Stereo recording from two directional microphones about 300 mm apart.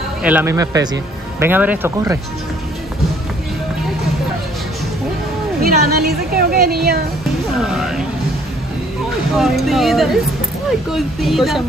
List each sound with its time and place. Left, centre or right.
0.2 s speech: centre
5.6 s a woman's voice: right
7.5 s a sound: centre
9.4 s speech: centre